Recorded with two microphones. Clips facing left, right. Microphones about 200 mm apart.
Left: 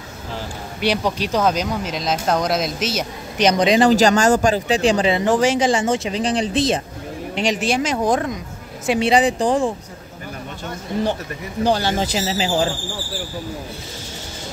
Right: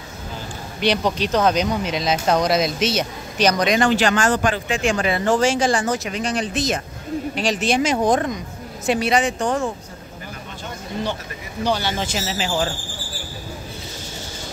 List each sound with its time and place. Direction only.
0.7 s speech: 5° left (ahead or behind)
3.3 s speech: 25° left (ahead or behind)
3.9 s speech: 40° left (ahead or behind)
5.1 s speech: 15° left (ahead or behind)
7.3 s speech: 15° left (ahead or behind)
9.0 s speech: 30° left (ahead or behind)
11.6 s speech: 40° left (ahead or behind)